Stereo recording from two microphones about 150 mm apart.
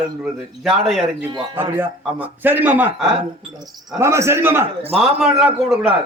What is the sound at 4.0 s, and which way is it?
Speech, 20° right (ahead or behind).